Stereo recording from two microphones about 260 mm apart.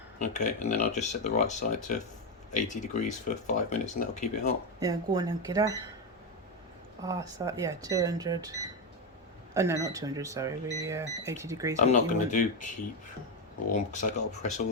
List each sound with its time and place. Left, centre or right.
0.2 s speech: left
4.8 s speech: centre
7.0 s speech: centre
11.8 s speech: left
14.1 s speech: left